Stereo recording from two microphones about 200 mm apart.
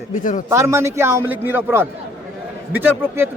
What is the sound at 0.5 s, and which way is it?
Speech, 15° right (ahead or behind).